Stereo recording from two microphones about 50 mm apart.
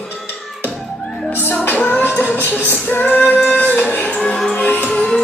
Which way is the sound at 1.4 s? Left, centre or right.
Left.